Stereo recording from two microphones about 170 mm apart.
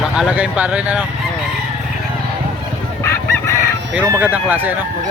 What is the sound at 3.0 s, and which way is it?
Chicken, 15° left (ahead or behind).